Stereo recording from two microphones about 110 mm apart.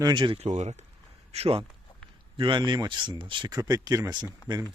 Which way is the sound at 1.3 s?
65° right (ahead or behind).